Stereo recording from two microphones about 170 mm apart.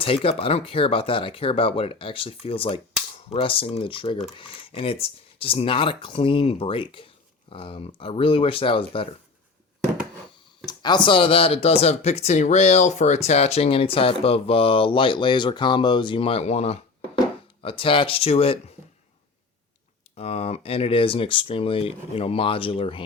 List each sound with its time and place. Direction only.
0.0 s speech: 35° left (ahead or behind)
10.7 s speech: 25° left (ahead or behind)
20.1 s speech: 35° left (ahead or behind)